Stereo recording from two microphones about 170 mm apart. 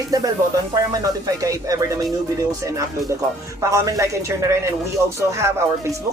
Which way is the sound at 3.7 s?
20° right (ahead or behind).